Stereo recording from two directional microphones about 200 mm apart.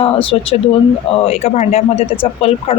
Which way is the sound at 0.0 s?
25° left (ahead or behind).